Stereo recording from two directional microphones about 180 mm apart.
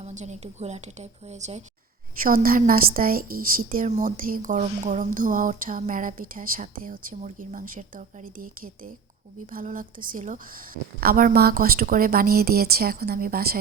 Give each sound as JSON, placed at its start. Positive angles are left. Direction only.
{"t": 0.0, "sound": "a woman's voice", "side_deg": -40}
{"t": 2.2, "sound": "a woman's voice", "side_deg": -50}